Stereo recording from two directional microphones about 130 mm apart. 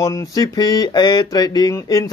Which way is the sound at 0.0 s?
25° left (ahead or behind).